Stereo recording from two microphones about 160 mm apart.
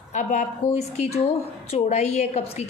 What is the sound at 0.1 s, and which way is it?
A woman's voice, 50° left (ahead or behind).